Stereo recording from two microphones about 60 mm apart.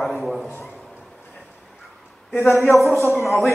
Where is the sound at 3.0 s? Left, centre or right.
Left.